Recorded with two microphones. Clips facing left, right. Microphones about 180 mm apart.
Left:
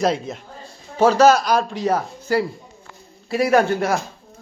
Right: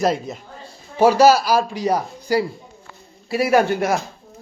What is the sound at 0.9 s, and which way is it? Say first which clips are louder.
A man's voice: right 1 dB; 10° right (ahead or behind).